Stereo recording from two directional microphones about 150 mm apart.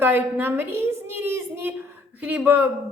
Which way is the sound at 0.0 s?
15° right (ahead or behind).